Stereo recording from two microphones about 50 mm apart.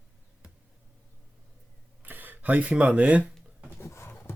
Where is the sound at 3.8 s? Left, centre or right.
Left.